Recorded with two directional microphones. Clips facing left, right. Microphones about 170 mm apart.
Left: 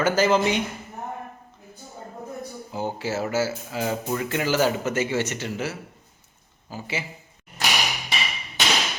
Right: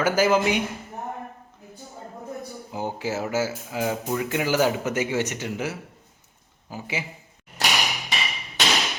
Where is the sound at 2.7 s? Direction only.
15° right (ahead or behind).